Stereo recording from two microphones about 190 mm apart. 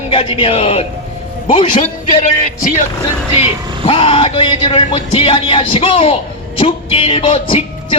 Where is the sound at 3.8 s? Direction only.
30° left (ahead or behind).